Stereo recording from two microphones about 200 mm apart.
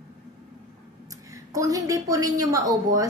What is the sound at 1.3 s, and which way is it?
A woman's voice, 15° right (ahead or behind).